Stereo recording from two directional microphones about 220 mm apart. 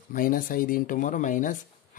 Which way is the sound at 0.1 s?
40° left (ahead or behind).